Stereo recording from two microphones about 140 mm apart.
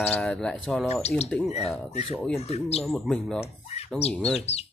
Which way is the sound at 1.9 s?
50° left (ahead or behind).